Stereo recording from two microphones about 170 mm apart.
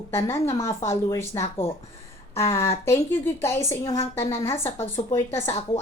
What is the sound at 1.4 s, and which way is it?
Speech, 35° left (ahead or behind).